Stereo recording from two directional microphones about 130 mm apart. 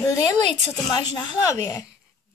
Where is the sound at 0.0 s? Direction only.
25° left (ahead or behind).